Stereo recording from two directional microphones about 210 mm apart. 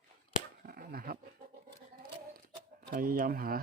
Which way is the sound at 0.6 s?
45° right (ahead or behind).